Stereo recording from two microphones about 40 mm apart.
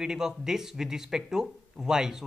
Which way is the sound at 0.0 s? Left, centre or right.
Centre.